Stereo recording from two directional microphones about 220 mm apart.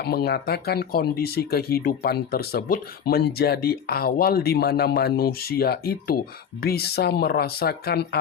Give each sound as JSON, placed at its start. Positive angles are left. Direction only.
{"t": 0.0, "sound": "speech", "side_deg": 45}